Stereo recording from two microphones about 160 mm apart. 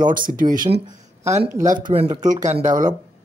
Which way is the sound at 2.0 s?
50° right (ahead or behind).